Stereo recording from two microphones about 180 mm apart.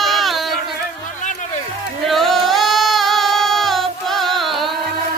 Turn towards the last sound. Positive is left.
turn(degrees=0)  # may be behind; listen again after turning